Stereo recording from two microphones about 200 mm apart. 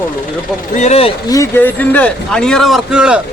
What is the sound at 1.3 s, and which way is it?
Speech, 10° left (ahead or behind).